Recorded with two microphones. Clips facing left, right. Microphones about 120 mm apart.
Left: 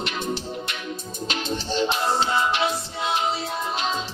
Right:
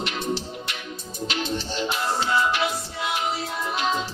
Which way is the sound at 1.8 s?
25° left (ahead or behind).